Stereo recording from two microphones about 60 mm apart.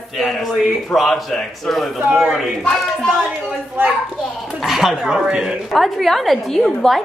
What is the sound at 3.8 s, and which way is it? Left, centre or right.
Speech, right.